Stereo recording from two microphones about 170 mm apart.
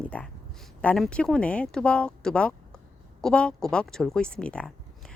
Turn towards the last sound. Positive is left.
turn(degrees=5)  # may be behind; listen again after turning